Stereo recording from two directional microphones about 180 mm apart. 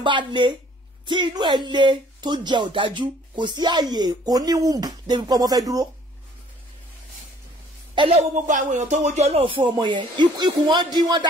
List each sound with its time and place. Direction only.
0.0 s speech: 25° right (ahead or behind)
7.9 s speech: 30° right (ahead or behind)